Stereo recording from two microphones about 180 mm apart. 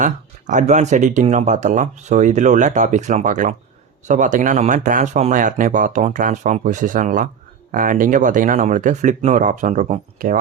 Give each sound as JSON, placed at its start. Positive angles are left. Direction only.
{"t": 0.0, "sound": "speech", "side_deg": -45}